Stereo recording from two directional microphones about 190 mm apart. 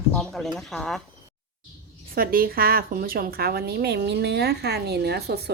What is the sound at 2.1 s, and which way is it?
A woman's voice, 50° right (ahead or behind).